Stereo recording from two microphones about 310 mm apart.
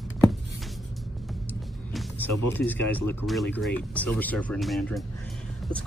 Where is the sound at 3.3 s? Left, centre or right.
Centre.